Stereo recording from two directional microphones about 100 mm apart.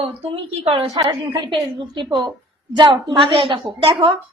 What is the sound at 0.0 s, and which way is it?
Speech, 75° right (ahead or behind).